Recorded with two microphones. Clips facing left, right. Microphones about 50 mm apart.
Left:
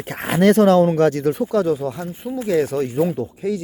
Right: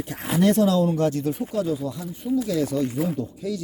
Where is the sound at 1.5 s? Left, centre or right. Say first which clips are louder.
Left 6 dB; left.